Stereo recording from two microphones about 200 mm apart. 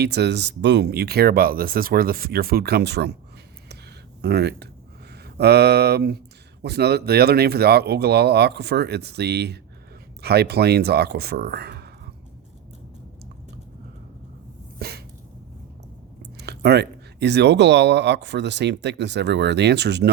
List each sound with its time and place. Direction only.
0.0 s speech: 55° right (ahead or behind)
4.2 s speech: 55° right (ahead or behind)
14.8 s dog: 50° right (ahead or behind)
16.4 s speech: 55° right (ahead or behind)